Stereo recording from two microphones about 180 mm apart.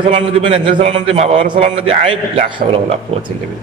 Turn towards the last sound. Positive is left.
turn(degrees=-25)  # may be behind; listen again after turning